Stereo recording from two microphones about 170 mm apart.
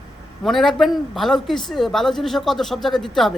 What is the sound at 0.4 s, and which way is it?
A man's voice, centre (ahead or behind).